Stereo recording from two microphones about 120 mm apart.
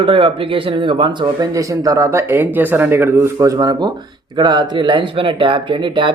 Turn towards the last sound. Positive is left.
turn(degrees=-40)  # may be behind; listen again after turning